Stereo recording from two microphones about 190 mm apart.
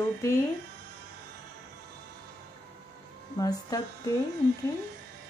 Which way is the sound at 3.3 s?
20° left (ahead or behind).